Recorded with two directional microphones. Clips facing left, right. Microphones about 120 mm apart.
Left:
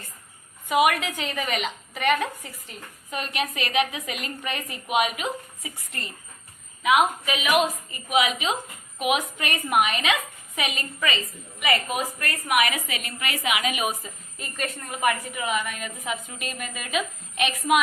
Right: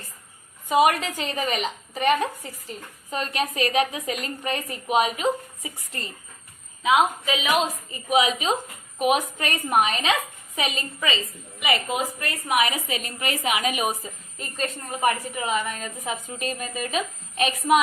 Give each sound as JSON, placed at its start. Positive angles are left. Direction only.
{"t": 0.7, "sound": "a woman's voice", "side_deg": -35}